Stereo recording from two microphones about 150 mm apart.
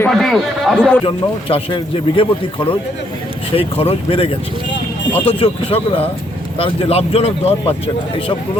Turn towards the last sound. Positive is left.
turn(degrees=45)  # may be behind; listen again after turning